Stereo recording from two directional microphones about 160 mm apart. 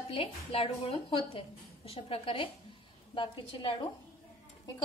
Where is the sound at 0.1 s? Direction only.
35° left (ahead or behind).